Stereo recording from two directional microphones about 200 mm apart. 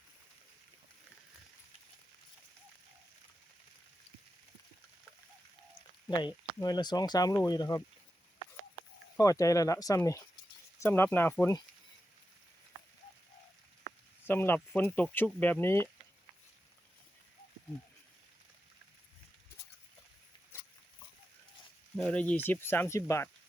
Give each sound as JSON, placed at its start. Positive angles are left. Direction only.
{"t": 6.1, "sound": "speech", "side_deg": 20}
{"t": 9.1, "sound": "speech", "side_deg": 15}
{"t": 14.3, "sound": "speech", "side_deg": 10}
{"t": 21.9, "sound": "speech", "side_deg": 5}